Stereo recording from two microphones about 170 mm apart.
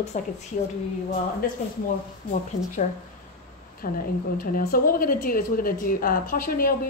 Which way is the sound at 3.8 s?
55° left (ahead or behind).